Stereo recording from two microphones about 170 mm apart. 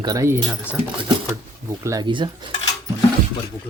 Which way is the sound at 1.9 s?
25° right (ahead or behind).